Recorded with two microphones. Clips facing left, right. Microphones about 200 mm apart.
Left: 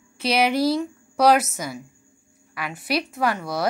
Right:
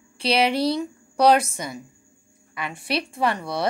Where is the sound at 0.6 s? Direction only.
5° left (ahead or behind).